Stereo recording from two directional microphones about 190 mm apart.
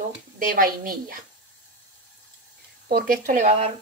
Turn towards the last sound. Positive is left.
turn(degrees=-40)  # may be behind; listen again after turning